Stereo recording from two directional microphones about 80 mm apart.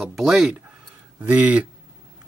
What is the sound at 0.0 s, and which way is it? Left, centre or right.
Speech, centre.